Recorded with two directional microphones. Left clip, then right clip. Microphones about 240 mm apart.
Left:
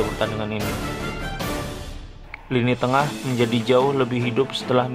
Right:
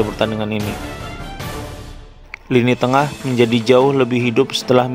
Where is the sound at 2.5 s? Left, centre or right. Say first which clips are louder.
Right 6 dB; right.